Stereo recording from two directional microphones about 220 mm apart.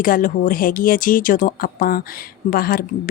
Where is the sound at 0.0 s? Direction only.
40° left (ahead or behind).